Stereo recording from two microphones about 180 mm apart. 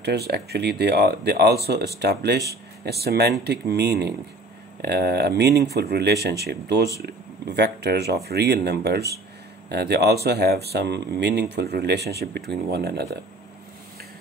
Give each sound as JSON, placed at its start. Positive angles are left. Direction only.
{"t": 0.0, "sound": "speech", "side_deg": -65}